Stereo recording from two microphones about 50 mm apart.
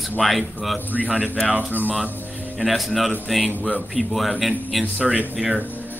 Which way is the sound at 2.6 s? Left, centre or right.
Centre.